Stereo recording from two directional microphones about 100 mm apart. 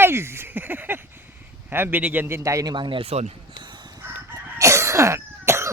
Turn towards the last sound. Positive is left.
turn(degrees=-25)  # may be behind; listen again after turning